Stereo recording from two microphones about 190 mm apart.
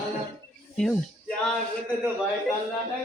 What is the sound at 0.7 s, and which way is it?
Speech, 5° left (ahead or behind).